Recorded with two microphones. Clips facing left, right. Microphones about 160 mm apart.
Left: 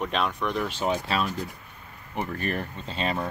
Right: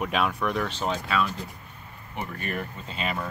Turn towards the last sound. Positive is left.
turn(degrees=35)  # may be behind; listen again after turning